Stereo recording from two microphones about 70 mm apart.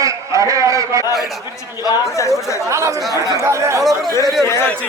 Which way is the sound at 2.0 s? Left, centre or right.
Left.